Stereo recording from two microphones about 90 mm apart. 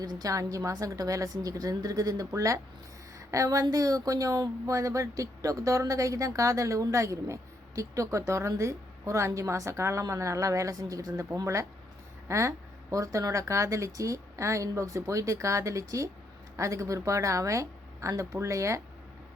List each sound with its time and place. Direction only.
0.0 s a woman's voice: 40° right (ahead or behind)